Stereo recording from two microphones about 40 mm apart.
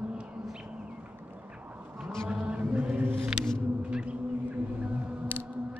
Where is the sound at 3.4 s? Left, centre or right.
Right.